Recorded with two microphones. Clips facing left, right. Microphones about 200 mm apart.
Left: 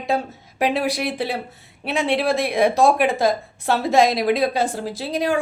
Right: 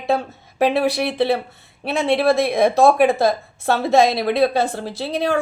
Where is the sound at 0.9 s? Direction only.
10° left (ahead or behind).